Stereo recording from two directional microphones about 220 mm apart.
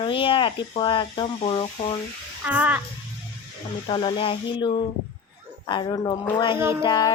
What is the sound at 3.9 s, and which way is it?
Speech, 20° left (ahead or behind).